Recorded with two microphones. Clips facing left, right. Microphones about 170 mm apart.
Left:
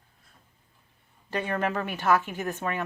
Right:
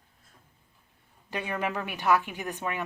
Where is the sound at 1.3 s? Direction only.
10° right (ahead or behind).